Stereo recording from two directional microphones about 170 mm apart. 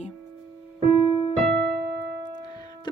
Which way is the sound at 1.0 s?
30° left (ahead or behind).